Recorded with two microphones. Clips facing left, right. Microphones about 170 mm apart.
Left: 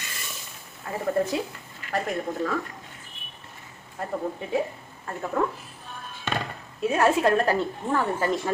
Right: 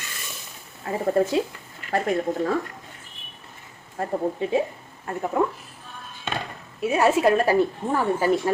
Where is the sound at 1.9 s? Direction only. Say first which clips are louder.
Right 5 dB; 35° right (ahead or behind).